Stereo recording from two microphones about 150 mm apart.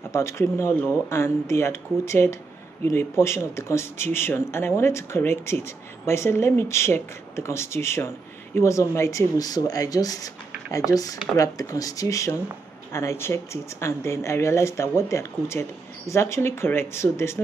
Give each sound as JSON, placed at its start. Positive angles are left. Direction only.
{"t": 0.1, "sound": "speech", "side_deg": 20}